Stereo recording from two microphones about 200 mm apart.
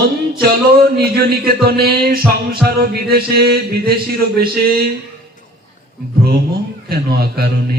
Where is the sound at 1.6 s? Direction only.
50° right (ahead or behind).